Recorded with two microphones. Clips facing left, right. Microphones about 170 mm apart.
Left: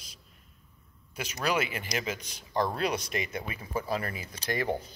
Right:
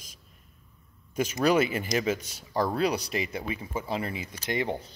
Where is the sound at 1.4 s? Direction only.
40° right (ahead or behind).